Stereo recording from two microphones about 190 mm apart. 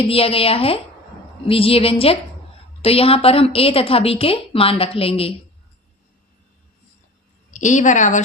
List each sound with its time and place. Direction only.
0.0 s a woman's voice: 30° left (ahead or behind)
7.5 s a woman's voice: 40° left (ahead or behind)